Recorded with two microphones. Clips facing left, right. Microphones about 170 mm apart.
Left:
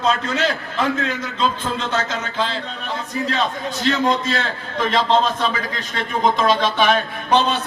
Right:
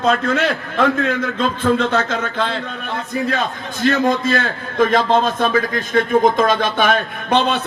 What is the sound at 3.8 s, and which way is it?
A man's voice, 50° right (ahead or behind).